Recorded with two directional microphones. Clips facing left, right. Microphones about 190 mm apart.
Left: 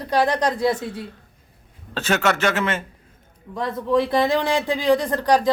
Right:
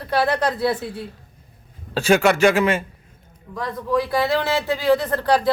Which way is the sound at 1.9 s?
10° right (ahead or behind).